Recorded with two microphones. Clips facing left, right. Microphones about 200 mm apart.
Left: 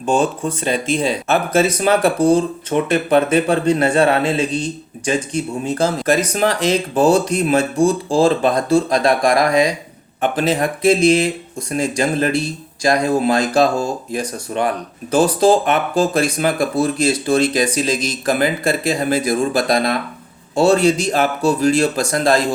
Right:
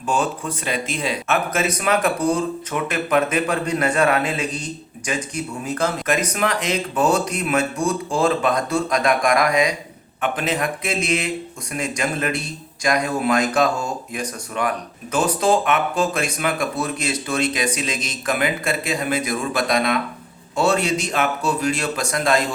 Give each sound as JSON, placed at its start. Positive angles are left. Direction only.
{"t": 0.0, "sound": "a man's voice", "side_deg": 30}